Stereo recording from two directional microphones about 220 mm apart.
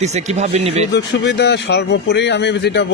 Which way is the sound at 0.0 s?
30° right (ahead or behind).